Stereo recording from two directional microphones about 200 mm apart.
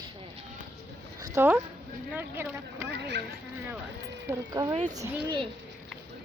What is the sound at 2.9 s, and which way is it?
Speech, 60° right (ahead or behind).